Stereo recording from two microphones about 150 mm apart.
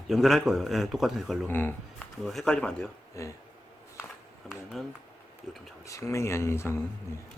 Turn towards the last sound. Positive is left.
turn(degrees=15)  # may be behind; listen again after turning